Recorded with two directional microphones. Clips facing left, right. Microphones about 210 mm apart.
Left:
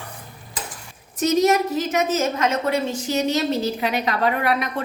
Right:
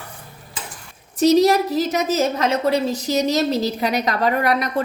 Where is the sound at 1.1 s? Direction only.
35° right (ahead or behind).